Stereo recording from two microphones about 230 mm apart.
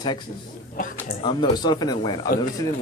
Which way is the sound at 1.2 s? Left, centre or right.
Left.